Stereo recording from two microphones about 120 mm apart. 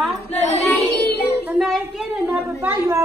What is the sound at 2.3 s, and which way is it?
Speech, 15° right (ahead or behind).